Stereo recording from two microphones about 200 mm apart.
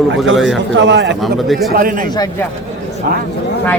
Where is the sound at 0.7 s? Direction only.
65° right (ahead or behind).